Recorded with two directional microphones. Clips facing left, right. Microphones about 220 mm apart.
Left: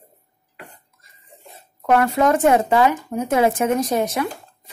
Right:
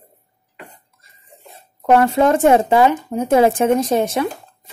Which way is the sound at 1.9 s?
30° right (ahead or behind).